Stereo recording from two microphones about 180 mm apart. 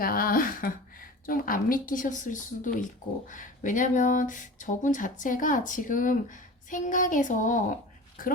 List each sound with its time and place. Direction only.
0.0 s speech: 55° left (ahead or behind)